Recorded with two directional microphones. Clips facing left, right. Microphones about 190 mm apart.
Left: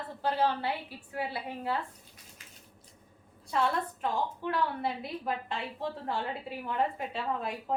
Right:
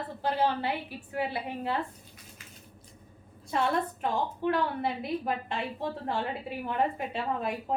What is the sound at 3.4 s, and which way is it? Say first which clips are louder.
A woman's voice: right 2 dB; 20° right (ahead or behind).